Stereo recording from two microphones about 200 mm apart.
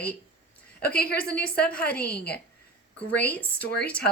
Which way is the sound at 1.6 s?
5° left (ahead or behind).